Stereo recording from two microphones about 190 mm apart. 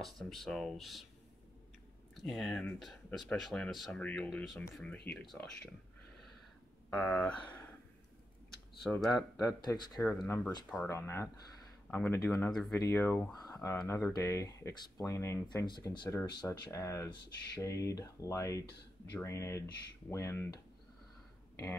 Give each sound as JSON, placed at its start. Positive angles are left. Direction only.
{"t": 0.0, "sound": "speech", "side_deg": 0}
{"t": 2.1, "sound": "speech", "side_deg": 0}
{"t": 6.9, "sound": "speech", "side_deg": 5}
{"t": 8.8, "sound": "speech", "side_deg": 0}
{"t": 9.6, "sound": "speech", "side_deg": 25}
{"t": 9.9, "sound": "speech", "side_deg": 0}
{"t": 10.9, "sound": "speech", "side_deg": 15}
{"t": 12.3, "sound": "speech", "side_deg": 0}
{"t": 12.7, "sound": "speech", "side_deg": 15}